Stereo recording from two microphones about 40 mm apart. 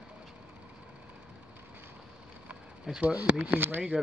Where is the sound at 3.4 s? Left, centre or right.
Right.